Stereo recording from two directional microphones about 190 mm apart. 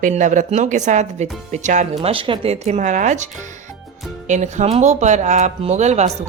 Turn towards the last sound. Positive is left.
turn(degrees=-35)  # may be behind; listen again after turning